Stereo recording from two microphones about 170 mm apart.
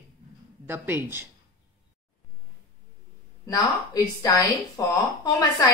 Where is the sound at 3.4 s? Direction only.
20° left (ahead or behind).